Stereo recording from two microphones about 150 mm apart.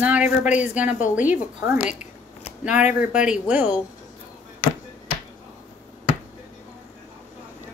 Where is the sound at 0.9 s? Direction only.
55° left (ahead or behind).